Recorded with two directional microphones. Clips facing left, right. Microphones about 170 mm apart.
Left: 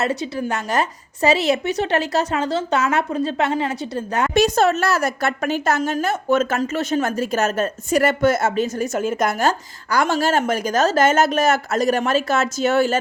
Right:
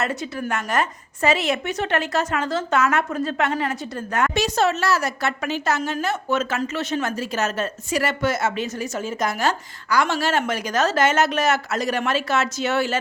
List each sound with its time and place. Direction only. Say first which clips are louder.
0.0 s speech: left 4 dB; 30° left (ahead or behind)
4.4 s a woman's voice: left 7 dB; 50° left (ahead or behind)